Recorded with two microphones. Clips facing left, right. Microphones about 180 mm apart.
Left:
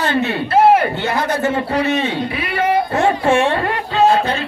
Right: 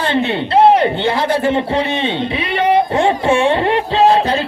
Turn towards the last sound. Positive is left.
turn(degrees=-25)  # may be behind; listen again after turning